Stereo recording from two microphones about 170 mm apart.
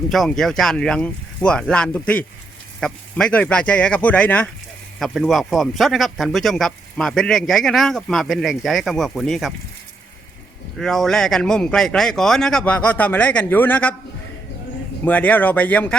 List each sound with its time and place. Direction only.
0.1 s speech: centre (ahead or behind)
10.8 s speech: centre (ahead or behind)
15.0 s speech: 10° left (ahead or behind)